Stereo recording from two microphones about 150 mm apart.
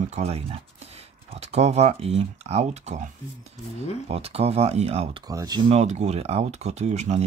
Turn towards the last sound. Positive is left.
turn(degrees=-50)  # may be behind; listen again after turning